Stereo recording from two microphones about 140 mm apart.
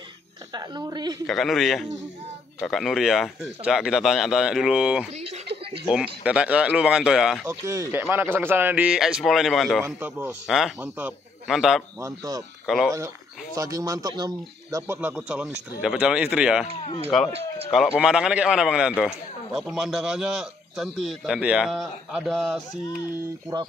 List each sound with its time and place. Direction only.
0.5 s speech: 30° right (ahead or behind)
1.2 s a man's voice: centre (ahead or behind)
7.4 s a man's voice: 20° right (ahead or behind); by 9.8 s centre (ahead or behind)
9.8 s a man's voice: 10° right (ahead or behind)
12.0 s speech: 25° right (ahead or behind)
12.6 s speech: centre (ahead or behind)
13.6 s speech: 25° right (ahead or behind); by 16.6 s 5° right (ahead or behind)
17.3 s speech: 45° right (ahead or behind)
17.7 s a man's voice: 5° right (ahead or behind)